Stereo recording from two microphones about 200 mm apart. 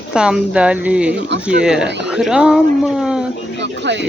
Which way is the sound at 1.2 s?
60° right (ahead or behind).